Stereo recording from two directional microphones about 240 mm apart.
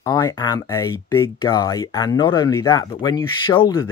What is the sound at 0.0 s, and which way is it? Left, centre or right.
Speech, centre.